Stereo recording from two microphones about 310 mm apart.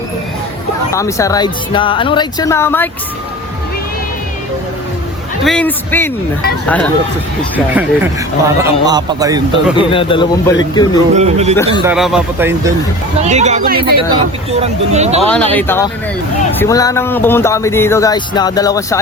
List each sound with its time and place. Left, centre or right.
0.9 s speech: centre
5.4 s a man's voice: centre
7.8 s a man's voice: centre
9.7 s speech: centre
11.1 s speech: right
11.5 s speech: centre
11.8 s a man's voice: centre
13.2 s speech: right
15.5 s speech: centre